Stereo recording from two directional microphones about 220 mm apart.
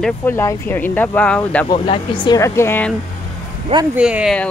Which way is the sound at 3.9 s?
5° right (ahead or behind).